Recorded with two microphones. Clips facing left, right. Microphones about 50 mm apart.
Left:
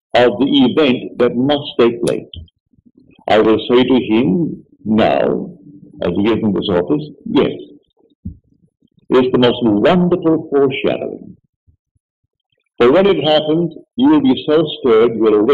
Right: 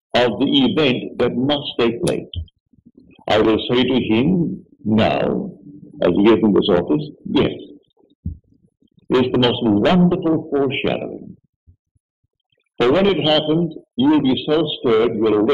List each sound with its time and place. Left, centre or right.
0.3 s a man's voice: centre
3.0 s a sound: centre
3.4 s a man's voice: centre
6.6 s heart murmur: centre
9.4 s a man's voice: centre
12.7 s a man's voice: centre